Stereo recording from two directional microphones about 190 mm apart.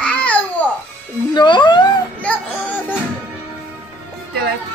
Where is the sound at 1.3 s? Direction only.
25° left (ahead or behind).